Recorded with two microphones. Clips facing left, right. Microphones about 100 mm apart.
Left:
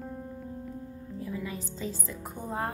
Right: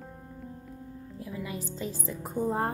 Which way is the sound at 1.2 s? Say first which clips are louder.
Left 1 dB; 15° right (ahead or behind).